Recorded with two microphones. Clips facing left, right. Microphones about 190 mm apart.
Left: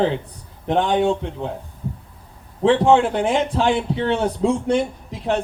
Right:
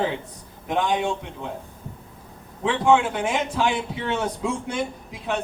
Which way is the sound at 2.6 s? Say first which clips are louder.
Left 5 dB; 30° left (ahead or behind).